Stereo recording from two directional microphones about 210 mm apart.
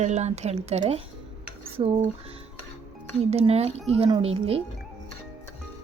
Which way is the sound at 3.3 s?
30° right (ahead or behind).